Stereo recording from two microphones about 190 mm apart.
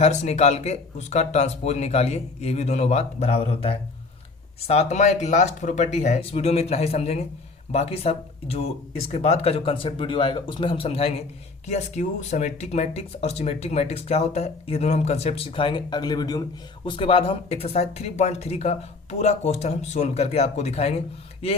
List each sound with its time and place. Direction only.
0.0 s speech: 35° left (ahead or behind)